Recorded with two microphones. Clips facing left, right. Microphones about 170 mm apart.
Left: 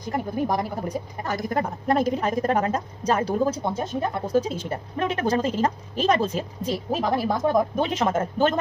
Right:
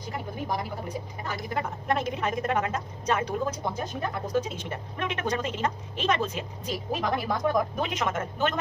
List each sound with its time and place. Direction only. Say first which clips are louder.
0.3 s speech: left 6 dB; 45° left (ahead or behind)